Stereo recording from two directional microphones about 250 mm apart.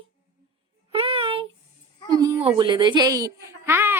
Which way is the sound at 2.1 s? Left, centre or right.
Centre.